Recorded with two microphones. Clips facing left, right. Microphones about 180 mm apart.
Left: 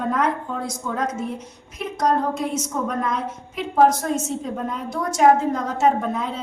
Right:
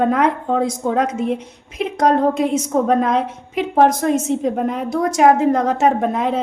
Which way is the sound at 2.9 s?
80° right.